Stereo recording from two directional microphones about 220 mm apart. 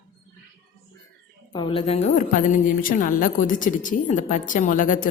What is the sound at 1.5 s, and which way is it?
A woman's voice, 20° left (ahead or behind).